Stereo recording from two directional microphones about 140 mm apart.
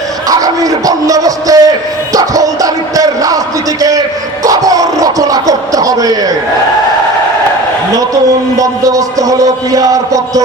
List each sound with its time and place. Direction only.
0.3 s speech: 25° right (ahead or behind)
2.1 s a sound: 25° right (ahead or behind)
7.9 s a man's voice: 25° right (ahead or behind)